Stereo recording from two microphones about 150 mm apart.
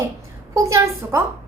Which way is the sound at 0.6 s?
20° right (ahead or behind).